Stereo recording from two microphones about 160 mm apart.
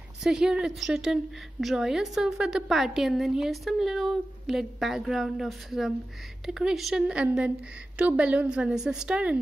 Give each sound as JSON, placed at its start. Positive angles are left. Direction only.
{"t": 0.2, "sound": "a woman's voice", "side_deg": -5}